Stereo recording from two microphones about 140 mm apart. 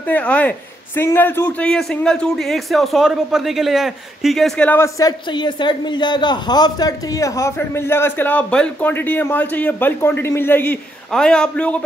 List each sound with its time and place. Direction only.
0.1 s a man's voice: 10° left (ahead or behind)